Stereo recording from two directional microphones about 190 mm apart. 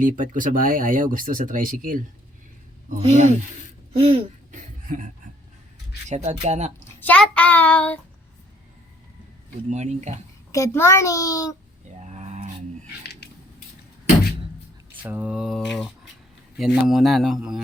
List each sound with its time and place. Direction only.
0.0 s speech: 45° right (ahead or behind)
3.0 s speech: 35° right (ahead or behind)
6.1 s speech: 35° right (ahead or behind)
7.0 s a child's voice: 5° left (ahead or behind)
9.6 s speech: 40° right (ahead or behind)
10.5 s a child's voice: 15° left (ahead or behind)
12.1 s a sound: 35° right (ahead or behind)
13.0 s a sound: 60° left (ahead or behind)
15.0 s speech: 10° right (ahead or behind)